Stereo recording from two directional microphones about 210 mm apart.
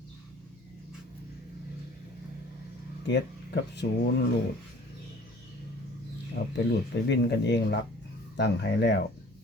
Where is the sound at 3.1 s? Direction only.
55° left (ahead or behind).